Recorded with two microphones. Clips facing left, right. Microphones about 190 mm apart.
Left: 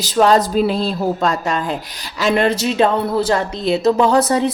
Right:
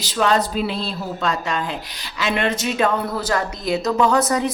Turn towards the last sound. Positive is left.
turn(degrees=30)  # may be behind; listen again after turning